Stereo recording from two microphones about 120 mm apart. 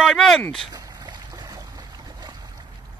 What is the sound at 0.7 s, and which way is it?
Boat, 35° right (ahead or behind).